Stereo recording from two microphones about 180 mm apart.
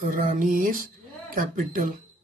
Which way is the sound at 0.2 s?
50° right (ahead or behind).